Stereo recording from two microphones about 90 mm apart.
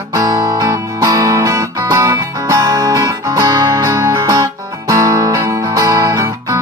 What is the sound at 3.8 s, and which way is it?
Music, 35° right (ahead or behind).